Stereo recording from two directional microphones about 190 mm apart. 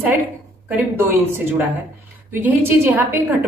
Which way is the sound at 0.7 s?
10° right (ahead or behind).